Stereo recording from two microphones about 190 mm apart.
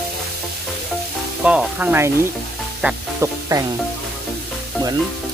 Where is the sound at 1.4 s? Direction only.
5° right (ahead or behind).